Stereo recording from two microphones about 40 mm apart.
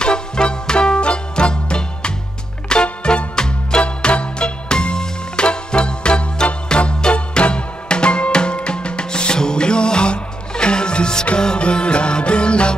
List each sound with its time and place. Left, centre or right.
0.0 s music: left